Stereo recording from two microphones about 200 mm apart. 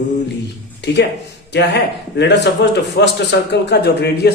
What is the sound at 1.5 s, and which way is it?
A man's voice, 60° left (ahead or behind).